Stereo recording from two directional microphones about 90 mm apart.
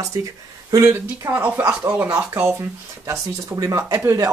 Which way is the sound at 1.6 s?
20° right (ahead or behind).